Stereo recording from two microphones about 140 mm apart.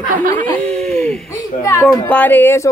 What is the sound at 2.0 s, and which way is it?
Speech, 10° left (ahead or behind).